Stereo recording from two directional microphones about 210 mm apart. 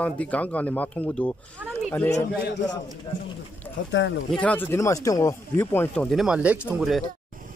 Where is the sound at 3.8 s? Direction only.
60° left (ahead or behind).